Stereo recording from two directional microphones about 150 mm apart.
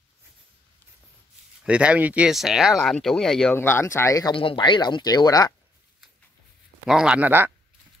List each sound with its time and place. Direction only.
1.6 s speech: 10° right (ahead or behind)
3.5 s speech: 15° left (ahead or behind)
4.4 s speech: 35° left (ahead or behind)
6.9 s speech: 5° right (ahead or behind)